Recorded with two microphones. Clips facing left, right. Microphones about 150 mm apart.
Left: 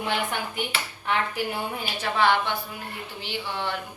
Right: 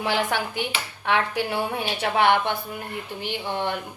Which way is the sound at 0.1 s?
90° right.